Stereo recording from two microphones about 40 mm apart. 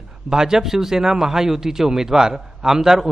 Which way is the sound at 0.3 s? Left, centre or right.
Centre.